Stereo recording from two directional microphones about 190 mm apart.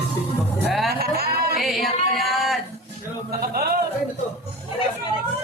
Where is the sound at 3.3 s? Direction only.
55° right (ahead or behind).